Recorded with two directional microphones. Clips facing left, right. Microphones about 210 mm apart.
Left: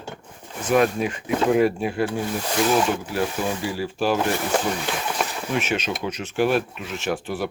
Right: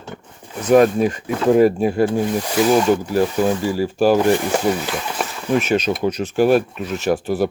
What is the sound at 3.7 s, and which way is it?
Speech, 40° right (ahead or behind).